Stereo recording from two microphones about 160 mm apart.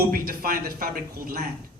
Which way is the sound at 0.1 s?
65° right (ahead or behind).